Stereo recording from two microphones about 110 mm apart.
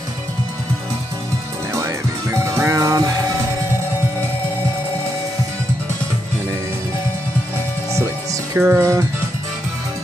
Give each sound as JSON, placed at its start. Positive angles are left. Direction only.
{"t": 2.3, "sound": "music", "side_deg": -25}
{"t": 7.9, "sound": "music", "side_deg": -30}